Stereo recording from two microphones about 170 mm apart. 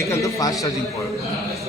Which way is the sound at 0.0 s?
20° left (ahead or behind).